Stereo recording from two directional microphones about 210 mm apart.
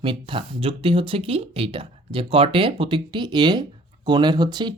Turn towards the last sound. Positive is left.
turn(degrees=-20)  # may be behind; listen again after turning